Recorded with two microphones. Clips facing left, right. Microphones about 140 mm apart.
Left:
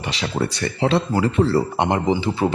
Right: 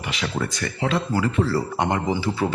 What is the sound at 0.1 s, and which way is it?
Speech, 30° left (ahead or behind).